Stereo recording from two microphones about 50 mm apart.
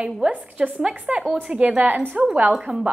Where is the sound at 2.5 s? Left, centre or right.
Centre.